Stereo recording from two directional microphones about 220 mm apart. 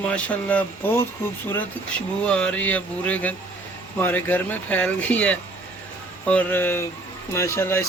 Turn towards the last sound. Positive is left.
turn(degrees=10)  # may be behind; listen again after turning